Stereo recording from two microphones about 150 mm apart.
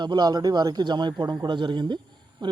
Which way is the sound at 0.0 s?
30° right (ahead or behind).